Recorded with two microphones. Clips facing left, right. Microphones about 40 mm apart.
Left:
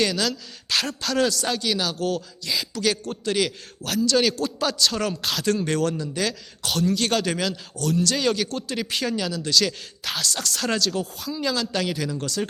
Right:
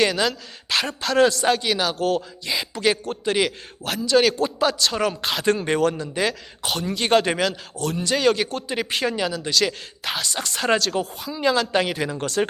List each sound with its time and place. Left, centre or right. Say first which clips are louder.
0.0 s a man's voice: right 3 dB; centre
8.1 s a man's voice: right 4 dB; centre
8.6 s a man's voice: right 3 dB; right
8.9 s a man's voice: right 3 dB; centre; by 12.5 s right